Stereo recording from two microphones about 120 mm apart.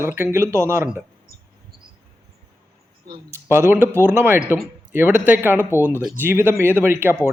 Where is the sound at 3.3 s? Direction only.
20° right (ahead or behind).